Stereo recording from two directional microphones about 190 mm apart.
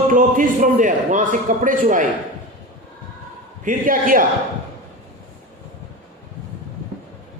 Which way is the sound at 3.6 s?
45° right (ahead or behind).